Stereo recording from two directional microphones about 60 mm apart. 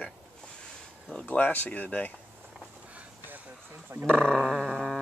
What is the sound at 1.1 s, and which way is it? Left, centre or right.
Speech, left.